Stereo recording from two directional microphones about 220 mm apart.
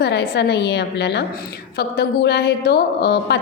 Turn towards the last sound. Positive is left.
turn(degrees=50)  # may be behind; listen again after turning